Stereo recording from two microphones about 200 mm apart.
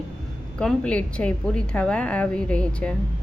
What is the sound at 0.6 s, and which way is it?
A woman's voice, 5° left (ahead or behind).